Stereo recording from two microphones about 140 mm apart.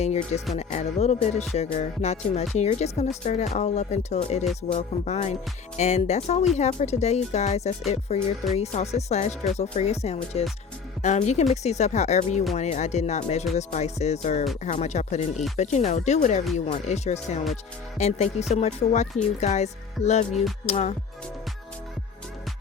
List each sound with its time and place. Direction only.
0.0 s speech: 50° left (ahead or behind)